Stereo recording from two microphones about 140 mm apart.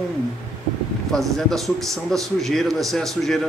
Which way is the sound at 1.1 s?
Centre (ahead or behind).